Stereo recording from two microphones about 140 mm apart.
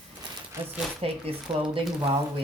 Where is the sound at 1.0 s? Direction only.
45° right (ahead or behind).